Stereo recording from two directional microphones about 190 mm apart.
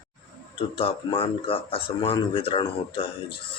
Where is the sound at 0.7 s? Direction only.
30° left (ahead or behind).